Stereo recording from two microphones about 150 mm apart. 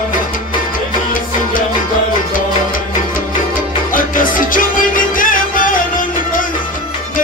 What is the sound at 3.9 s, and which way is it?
Music, 65° left (ahead or behind).